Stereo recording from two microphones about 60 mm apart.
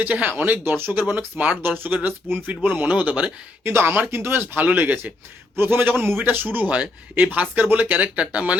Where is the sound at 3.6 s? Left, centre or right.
Right.